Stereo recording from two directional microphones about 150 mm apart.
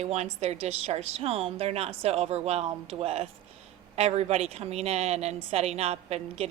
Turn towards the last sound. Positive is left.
turn(degrees=-45)  # may be behind; listen again after turning